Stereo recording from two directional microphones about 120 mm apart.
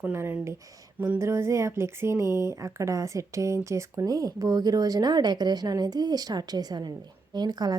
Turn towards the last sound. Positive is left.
turn(degrees=-35)  # may be behind; listen again after turning